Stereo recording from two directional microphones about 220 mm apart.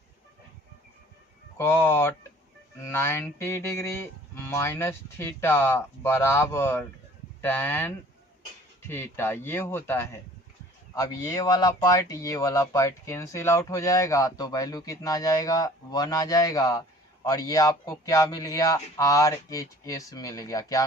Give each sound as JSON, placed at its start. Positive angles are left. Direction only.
{"t": 1.5, "sound": "speech", "side_deg": 10}